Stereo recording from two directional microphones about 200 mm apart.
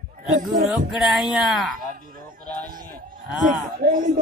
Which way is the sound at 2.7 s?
45° right (ahead or behind).